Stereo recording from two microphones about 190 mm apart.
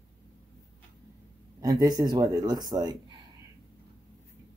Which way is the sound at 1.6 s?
20° right (ahead or behind).